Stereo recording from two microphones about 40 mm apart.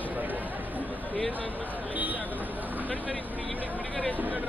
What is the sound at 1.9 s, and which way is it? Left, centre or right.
Speech, right.